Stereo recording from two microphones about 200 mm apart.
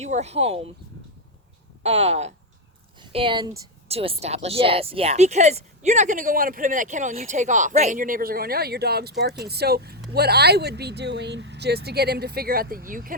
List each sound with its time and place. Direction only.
0.0 s speech: 35° right (ahead or behind)
1.8 s speech: 30° right (ahead or behind)